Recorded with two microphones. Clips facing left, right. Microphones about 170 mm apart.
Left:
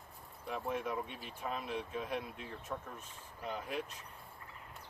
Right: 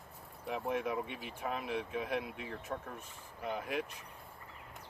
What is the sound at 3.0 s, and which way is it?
Speech, 10° right (ahead or behind).